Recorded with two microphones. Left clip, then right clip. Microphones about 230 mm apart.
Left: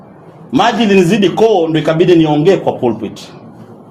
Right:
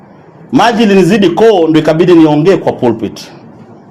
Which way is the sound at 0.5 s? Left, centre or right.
Right.